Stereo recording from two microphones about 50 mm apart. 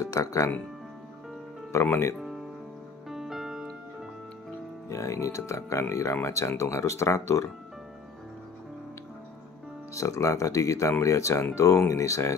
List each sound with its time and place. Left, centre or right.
0.0 s speech: left
1.7 s speech: left
2.1 s music: centre
4.8 s speech: left
6.2 s speech: left
9.9 s speech: left